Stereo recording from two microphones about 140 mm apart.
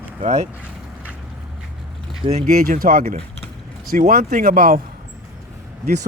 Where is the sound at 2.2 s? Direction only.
50° right (ahead or behind).